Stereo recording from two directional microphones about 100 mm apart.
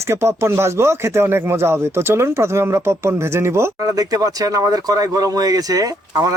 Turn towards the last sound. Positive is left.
turn(degrees=-35)  # may be behind; listen again after turning